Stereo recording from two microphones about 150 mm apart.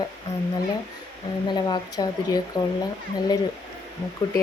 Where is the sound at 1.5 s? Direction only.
30° left (ahead or behind).